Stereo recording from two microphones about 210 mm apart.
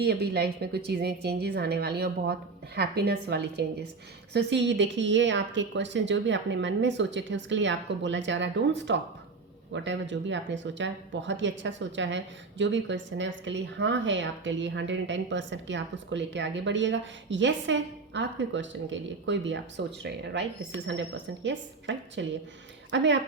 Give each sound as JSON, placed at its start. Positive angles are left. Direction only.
{"t": 0.0, "sound": "a woman's voice", "side_deg": -50}